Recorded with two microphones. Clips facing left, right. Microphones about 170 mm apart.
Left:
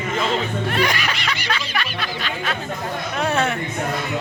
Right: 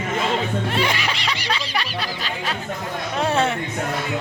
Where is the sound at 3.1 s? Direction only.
30° right (ahead or behind).